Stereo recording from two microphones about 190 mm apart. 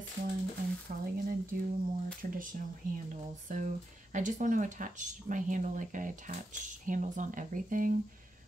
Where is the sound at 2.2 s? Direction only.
45° right (ahead or behind).